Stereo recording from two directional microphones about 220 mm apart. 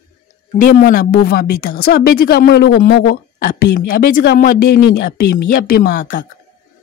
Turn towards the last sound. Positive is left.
turn(degrees=40)  # may be behind; listen again after turning